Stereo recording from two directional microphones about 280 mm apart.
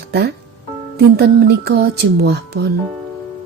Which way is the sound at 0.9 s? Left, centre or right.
Right.